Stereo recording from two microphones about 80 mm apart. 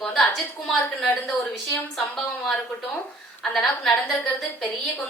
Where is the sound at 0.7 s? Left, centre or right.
Centre.